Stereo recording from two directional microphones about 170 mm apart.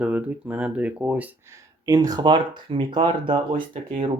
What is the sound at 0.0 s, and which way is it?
Speech, 10° right (ahead or behind).